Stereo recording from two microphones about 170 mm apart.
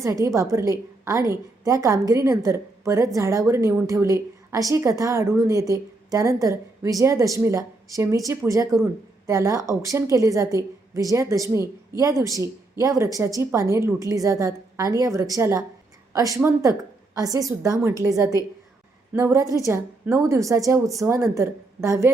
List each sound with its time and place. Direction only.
0.0 s a woman's voice: 20° right (ahead or behind)